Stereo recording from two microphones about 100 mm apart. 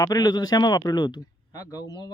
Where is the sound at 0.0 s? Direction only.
40° left (ahead or behind).